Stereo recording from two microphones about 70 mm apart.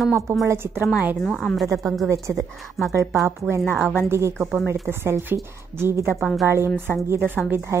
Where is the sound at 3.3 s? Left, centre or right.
Right.